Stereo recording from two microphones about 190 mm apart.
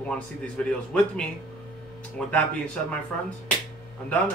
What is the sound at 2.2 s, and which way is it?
Speech, 5° left (ahead or behind).